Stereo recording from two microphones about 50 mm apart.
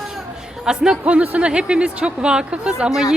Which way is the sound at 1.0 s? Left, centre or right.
Right.